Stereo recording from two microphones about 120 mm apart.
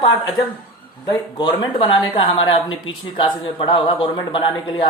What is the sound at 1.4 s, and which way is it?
Speech, 40° left (ahead or behind).